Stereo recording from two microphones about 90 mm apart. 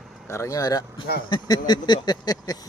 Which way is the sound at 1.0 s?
55° left (ahead or behind).